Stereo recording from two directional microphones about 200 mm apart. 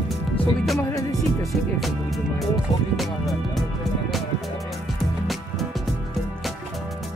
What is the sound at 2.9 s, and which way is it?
Speech, centre (ahead or behind).